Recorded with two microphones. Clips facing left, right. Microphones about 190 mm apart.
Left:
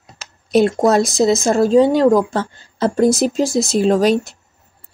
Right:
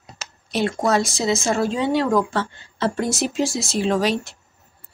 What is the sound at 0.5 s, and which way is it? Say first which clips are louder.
Speech: left 7 dB; 45° left (ahead or behind).